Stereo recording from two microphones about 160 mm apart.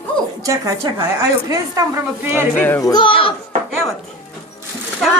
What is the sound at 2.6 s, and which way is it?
Speech, 15° left (ahead or behind).